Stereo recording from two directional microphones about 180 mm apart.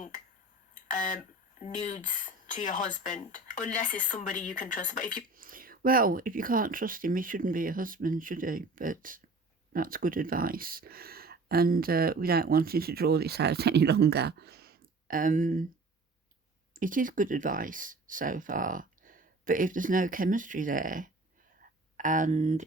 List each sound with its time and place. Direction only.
0.7 s speech: 45° left (ahead or behind)
5.3 s speech: 50° right (ahead or behind)
16.7 s speech: 50° right (ahead or behind)